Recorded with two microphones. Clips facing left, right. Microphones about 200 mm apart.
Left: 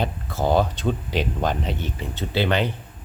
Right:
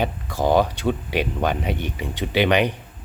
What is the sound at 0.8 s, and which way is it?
Speech, 10° right (ahead or behind).